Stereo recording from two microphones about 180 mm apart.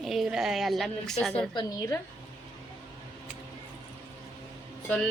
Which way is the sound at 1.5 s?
25° left (ahead or behind).